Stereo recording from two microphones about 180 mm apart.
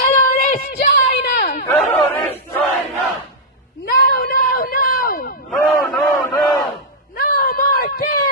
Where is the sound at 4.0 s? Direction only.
60° left (ahead or behind).